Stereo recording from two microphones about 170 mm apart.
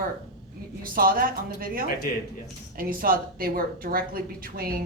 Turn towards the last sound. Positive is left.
turn(degrees=-60)  # may be behind; listen again after turning